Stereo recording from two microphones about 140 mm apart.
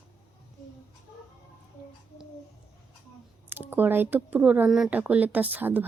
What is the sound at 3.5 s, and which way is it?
Speech, 15° right (ahead or behind).